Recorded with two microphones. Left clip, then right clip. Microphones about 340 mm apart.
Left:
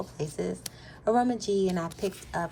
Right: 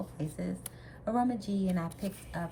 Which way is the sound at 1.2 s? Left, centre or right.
Left.